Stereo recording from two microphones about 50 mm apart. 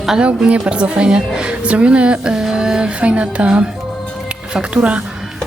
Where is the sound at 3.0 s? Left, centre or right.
Right.